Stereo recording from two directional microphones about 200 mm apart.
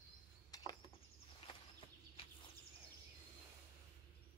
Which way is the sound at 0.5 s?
20° left (ahead or behind).